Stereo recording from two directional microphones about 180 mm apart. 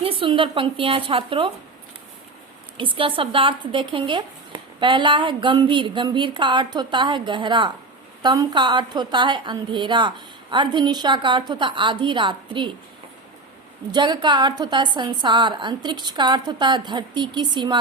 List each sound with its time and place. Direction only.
0.0 s a woman's voice: 30° right (ahead or behind)
2.7 s a woman's voice: 30° right (ahead or behind)
13.9 s a woman's voice: 25° right (ahead or behind)